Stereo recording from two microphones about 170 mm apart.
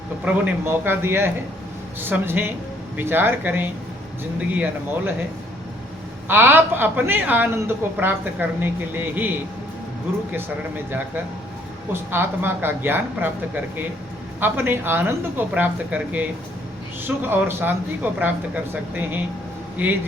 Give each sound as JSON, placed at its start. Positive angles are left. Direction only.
{"t": 0.3, "sound": "a woman's voice", "side_deg": -10}
{"t": 6.2, "sound": "a woman's voice", "side_deg": -10}
{"t": 10.3, "sound": "a woman's voice", "side_deg": -10}
{"t": 12.1, "sound": "a woman's voice", "side_deg": -15}